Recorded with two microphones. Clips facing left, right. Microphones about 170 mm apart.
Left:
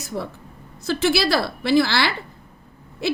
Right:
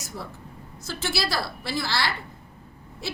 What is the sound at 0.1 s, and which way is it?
A woman's voice, 60° left (ahead or behind).